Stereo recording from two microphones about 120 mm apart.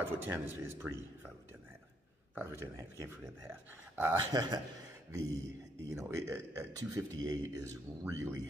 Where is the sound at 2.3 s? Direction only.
20° right (ahead or behind).